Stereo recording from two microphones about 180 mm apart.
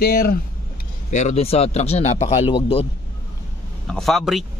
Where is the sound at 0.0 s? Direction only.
60° left (ahead or behind).